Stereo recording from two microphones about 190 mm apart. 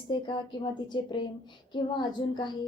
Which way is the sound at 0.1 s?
25° left (ahead or behind).